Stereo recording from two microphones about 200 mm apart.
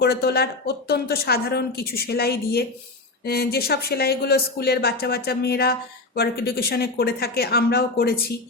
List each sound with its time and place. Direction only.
0.0 s speech: 50° left (ahead or behind)